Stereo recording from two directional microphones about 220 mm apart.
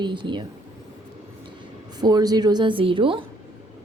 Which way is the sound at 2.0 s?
15° right (ahead or behind).